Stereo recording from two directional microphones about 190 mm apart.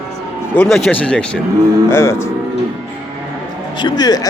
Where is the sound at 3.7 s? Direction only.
25° left (ahead or behind).